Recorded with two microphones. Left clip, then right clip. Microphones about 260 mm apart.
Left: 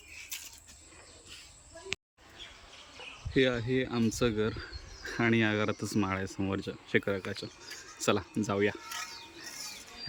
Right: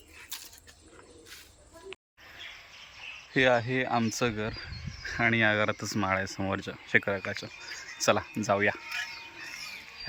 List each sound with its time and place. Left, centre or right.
3.3 s speech: centre